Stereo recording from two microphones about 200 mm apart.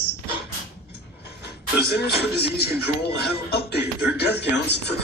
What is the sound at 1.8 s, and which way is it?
Speech, 55° left (ahead or behind).